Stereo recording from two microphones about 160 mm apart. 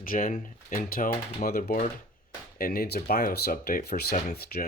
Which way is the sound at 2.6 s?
70° left (ahead or behind).